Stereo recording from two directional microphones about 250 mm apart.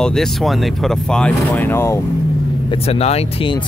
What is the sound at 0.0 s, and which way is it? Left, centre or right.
Speech, centre.